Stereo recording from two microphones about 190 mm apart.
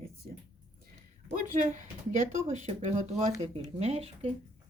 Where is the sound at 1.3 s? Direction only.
40° right (ahead or behind).